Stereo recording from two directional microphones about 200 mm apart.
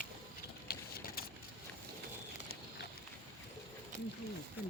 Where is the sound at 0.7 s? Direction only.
50° left (ahead or behind).